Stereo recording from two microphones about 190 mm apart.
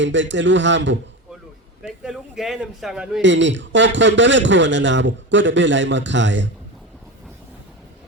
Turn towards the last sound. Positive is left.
turn(degrees=-75)  # may be behind; listen again after turning